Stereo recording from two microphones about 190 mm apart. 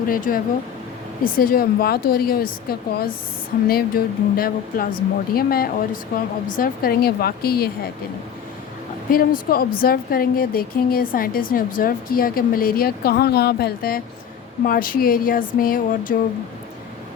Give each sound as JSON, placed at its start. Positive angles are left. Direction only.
{"t": 0.1, "sound": "speech", "side_deg": 50}
{"t": 9.0, "sound": "speech", "side_deg": 50}